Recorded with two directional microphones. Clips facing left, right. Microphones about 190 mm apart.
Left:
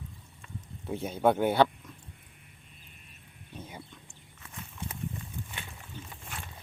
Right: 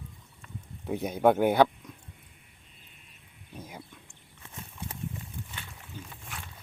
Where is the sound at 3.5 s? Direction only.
10° right (ahead or behind).